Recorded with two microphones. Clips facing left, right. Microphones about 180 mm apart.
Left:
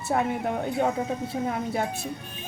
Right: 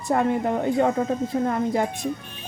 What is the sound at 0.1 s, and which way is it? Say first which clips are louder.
Speech: right 4 dB; 5° left (ahead or behind).